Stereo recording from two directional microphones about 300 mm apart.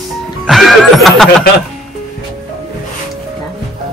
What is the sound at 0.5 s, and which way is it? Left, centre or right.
Speech, centre.